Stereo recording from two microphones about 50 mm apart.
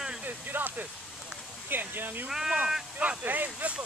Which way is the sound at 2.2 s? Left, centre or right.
Centre.